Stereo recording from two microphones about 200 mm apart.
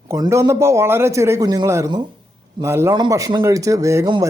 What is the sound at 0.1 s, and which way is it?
Speech, 15° right (ahead or behind).